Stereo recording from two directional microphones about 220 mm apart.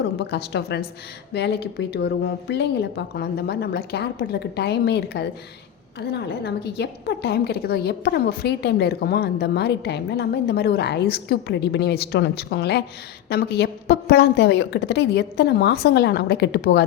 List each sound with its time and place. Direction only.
0.2 s a woman's voice: 50° left (ahead or behind)